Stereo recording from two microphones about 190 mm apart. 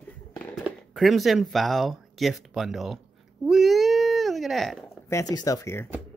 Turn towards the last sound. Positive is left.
turn(degrees=15)  # may be behind; listen again after turning